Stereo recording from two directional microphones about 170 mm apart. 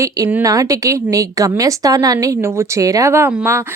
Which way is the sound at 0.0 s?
15° right (ahead or behind).